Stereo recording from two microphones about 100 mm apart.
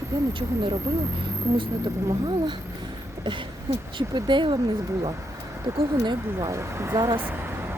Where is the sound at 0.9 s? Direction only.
30° right (ahead or behind).